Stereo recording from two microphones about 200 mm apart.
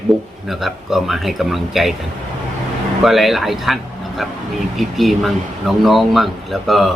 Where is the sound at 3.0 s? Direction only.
Centre (ahead or behind).